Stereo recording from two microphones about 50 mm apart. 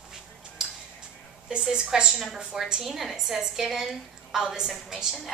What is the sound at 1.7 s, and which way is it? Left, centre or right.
A woman's voice, centre.